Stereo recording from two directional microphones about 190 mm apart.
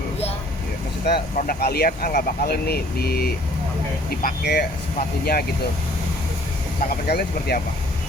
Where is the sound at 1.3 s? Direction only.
50° left (ahead or behind).